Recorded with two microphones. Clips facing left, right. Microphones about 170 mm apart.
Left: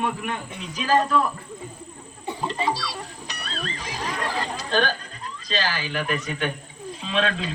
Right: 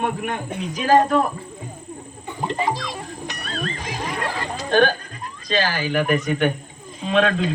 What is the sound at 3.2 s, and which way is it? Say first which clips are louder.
Music: right 6 dB; 50° right (ahead or behind).